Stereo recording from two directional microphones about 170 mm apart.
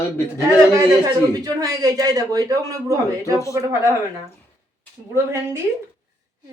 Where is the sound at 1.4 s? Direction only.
20° right (ahead or behind).